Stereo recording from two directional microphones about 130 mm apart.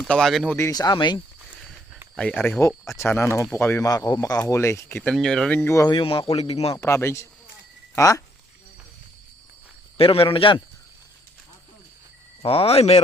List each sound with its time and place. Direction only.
0.0 s speech: 5° left (ahead or behind)
0.5 s speech: 25° left (ahead or behind)
2.1 s speech: 10° left (ahead or behind)
5.1 s speech: 5° left (ahead or behind)
5.6 s speech: 25° left (ahead or behind)
5.9 s speech: 40° left (ahead or behind)
6.7 s speech: 20° left (ahead or behind)
10.0 s speech: 45° left (ahead or behind)
12.4 s speech: 50° left (ahead or behind)